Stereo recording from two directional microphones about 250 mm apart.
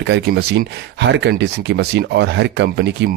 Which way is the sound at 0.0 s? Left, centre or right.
Right.